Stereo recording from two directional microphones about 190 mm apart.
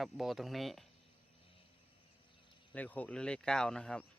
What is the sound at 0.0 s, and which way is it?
Speech, centre (ahead or behind).